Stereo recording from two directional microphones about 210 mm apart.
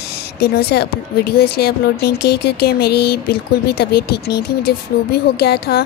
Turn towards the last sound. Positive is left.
turn(degrees=50)  # may be behind; listen again after turning